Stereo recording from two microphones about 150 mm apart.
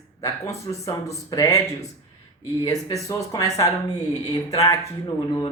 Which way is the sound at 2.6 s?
25° left (ahead or behind).